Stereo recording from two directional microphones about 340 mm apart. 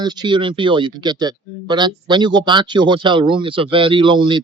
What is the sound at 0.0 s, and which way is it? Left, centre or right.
Speech, centre.